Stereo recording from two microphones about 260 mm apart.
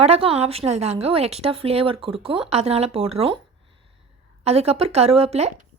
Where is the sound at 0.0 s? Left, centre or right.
Right.